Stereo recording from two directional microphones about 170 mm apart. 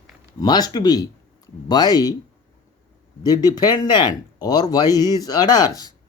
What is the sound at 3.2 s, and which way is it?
Speech, 25° left (ahead or behind).